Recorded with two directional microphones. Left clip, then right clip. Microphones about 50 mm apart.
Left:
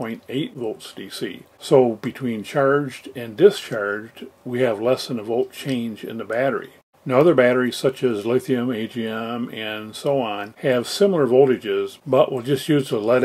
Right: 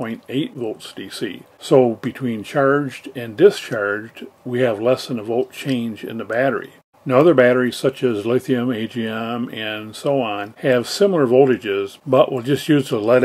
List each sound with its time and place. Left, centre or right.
0.0 s speech: centre